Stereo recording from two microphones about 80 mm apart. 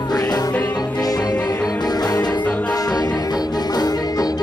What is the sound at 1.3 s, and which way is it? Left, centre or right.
Music, left.